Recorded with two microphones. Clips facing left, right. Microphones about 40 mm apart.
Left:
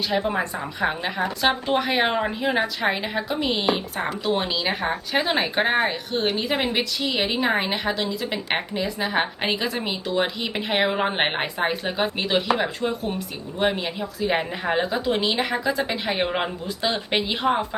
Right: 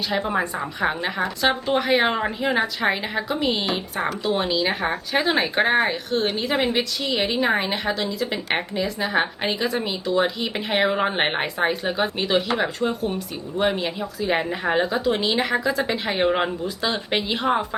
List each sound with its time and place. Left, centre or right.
0.1 s speech: centre